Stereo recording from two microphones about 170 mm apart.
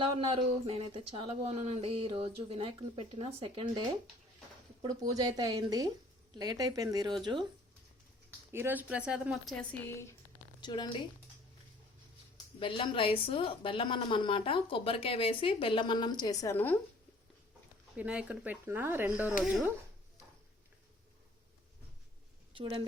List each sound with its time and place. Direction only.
0.0 s speech: 30° right (ahead or behind)
8.5 s speech: 10° right (ahead or behind)
9.8 s speech: 15° left (ahead or behind)
10.6 s a woman's voice: 25° left (ahead or behind)
12.5 s a woman's voice: 30° left (ahead or behind); by 16.7 s 15° left (ahead or behind)
17.9 s speech: 5° right (ahead or behind)
22.5 s speech: 30° right (ahead or behind)